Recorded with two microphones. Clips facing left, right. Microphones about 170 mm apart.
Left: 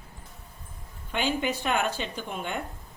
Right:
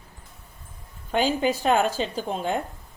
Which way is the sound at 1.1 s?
40° right (ahead or behind).